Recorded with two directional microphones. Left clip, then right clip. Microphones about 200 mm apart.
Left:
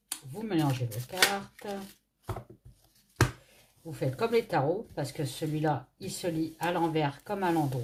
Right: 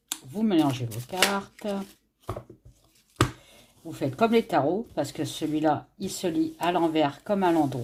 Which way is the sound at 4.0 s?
40° right (ahead or behind).